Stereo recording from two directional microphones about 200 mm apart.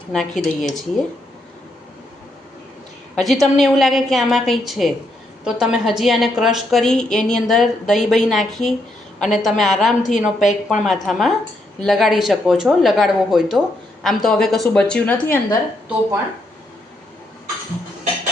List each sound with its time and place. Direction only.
0.1 s a woman's voice: centre (ahead or behind)
3.2 s a woman's voice: centre (ahead or behind)
10.0 s a woman's voice: 40° left (ahead or behind)
10.2 s a woman's voice: centre (ahead or behind)